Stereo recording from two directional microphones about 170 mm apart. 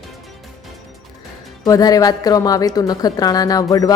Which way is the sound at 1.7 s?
20° left (ahead or behind).